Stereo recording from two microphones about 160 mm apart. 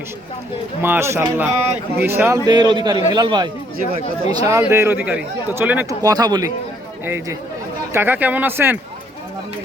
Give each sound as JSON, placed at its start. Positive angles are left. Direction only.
{"t": 0.8, "sound": "speech", "side_deg": -15}
{"t": 2.5, "sound": "a man's voice", "side_deg": -30}